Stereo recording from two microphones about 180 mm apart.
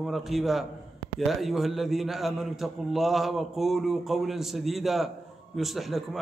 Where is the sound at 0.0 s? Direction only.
Centre (ahead or behind).